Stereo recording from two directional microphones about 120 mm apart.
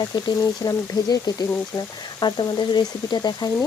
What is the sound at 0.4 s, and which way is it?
Speech, 30° left (ahead or behind).